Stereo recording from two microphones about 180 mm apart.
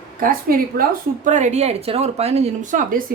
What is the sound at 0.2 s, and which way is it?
A woman's voice, 50° right (ahead or behind).